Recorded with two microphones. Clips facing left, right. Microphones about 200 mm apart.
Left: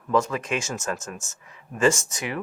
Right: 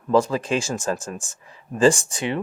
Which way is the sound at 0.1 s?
30° right (ahead or behind).